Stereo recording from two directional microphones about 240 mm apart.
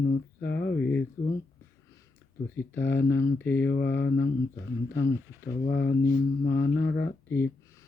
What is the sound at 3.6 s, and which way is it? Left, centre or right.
Speech, left.